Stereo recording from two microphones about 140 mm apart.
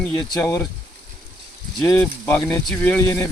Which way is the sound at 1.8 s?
10° left (ahead or behind).